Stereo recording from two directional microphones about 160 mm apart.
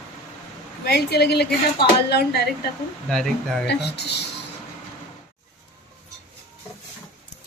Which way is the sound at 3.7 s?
90° left.